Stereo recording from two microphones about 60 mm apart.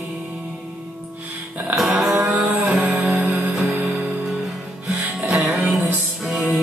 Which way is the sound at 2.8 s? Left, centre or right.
Right.